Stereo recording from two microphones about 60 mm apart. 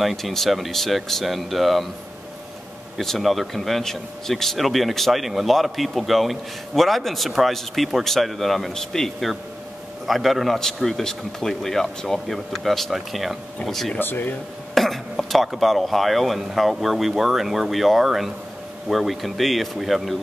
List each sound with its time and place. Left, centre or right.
0.0 s speech: centre
3.0 s speech: centre
13.9 s speech: left
14.7 s speech: centre